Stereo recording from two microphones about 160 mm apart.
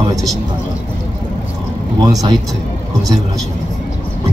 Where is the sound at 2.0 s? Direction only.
25° right (ahead or behind).